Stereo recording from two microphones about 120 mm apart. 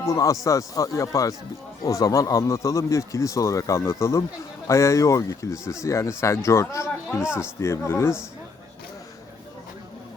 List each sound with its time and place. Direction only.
0.0 s speech: 25° left (ahead or behind)